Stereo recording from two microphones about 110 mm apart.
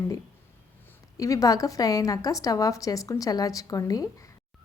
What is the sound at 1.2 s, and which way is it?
A woman's voice, 30° left (ahead or behind).